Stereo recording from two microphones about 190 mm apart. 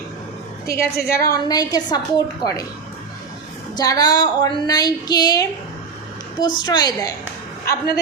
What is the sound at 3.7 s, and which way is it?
A woman's voice, 20° left (ahead or behind).